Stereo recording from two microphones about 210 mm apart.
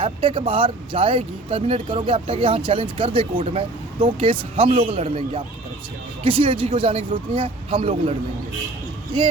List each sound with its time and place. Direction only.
0.0 s speech: 25° right (ahead or behind)